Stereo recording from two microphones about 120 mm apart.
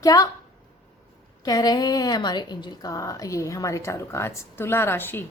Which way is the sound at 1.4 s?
35° left (ahead or behind).